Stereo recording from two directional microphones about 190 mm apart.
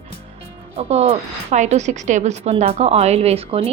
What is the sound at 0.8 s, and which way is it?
Speech, 35° right (ahead or behind).